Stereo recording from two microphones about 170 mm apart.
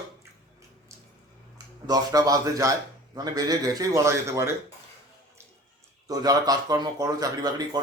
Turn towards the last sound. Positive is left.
turn(degrees=-20)  # may be behind; listen again after turning